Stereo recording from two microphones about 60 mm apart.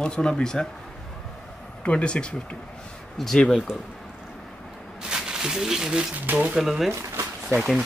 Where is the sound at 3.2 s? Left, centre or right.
Centre.